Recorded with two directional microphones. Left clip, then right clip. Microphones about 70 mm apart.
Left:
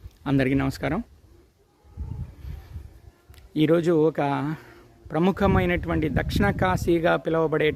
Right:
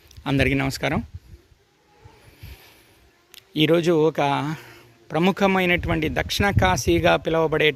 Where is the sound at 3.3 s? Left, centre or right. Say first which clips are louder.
Right 2 dB; centre.